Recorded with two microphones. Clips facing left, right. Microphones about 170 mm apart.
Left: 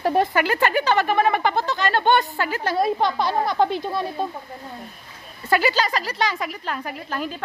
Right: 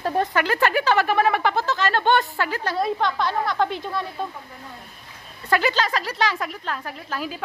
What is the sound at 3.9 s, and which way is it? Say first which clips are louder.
Speech: left 3 dB; 25° left (ahead or behind).